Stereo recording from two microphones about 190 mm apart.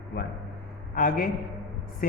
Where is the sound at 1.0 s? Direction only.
45° left (ahead or behind).